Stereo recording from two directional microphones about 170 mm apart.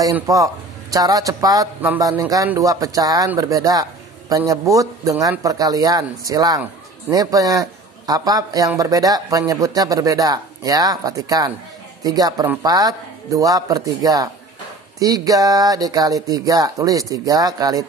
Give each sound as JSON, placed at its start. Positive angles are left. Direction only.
{"t": 0.1, "sound": "a man's voice", "side_deg": -20}